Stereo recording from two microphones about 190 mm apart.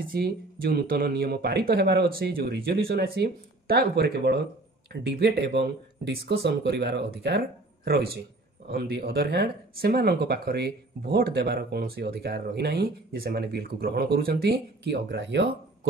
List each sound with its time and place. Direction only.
0.0 s speech: 50° right (ahead or behind); by 15.9 s 65° right (ahead or behind)